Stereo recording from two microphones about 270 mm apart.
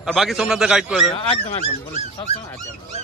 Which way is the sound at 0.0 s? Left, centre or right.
Centre.